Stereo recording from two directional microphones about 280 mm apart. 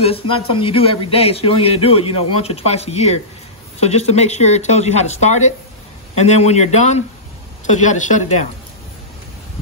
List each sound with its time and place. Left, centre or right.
0.0 s a man's voice: centre